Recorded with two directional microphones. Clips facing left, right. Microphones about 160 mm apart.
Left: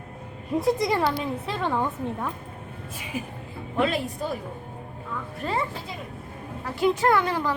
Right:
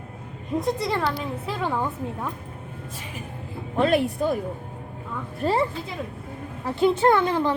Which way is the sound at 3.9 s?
60° right (ahead or behind).